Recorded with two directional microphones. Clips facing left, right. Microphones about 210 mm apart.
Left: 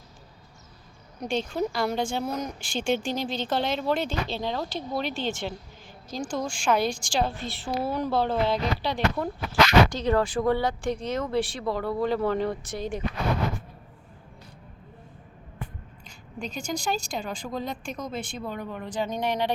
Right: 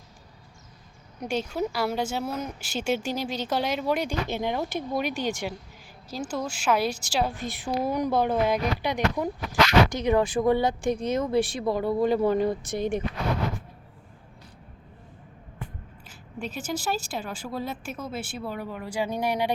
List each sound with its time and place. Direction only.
1.2 s speech: 10° right (ahead or behind)
16.0 s speech: 5° right (ahead or behind)